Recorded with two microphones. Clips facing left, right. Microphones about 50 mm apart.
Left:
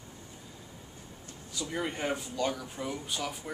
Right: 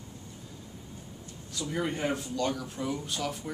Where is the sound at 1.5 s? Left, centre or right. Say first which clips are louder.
Right 2 dB; centre.